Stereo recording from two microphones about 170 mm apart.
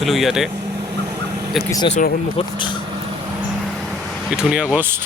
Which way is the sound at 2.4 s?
35° left (ahead or behind).